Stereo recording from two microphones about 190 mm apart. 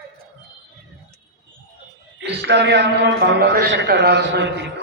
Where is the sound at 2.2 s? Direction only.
65° right (ahead or behind).